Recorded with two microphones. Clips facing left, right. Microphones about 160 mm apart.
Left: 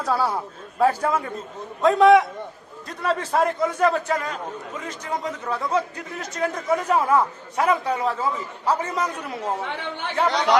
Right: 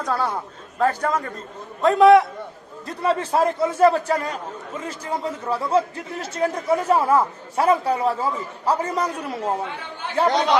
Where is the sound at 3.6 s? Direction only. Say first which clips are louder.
Right 4 dB; 35° right (ahead or behind).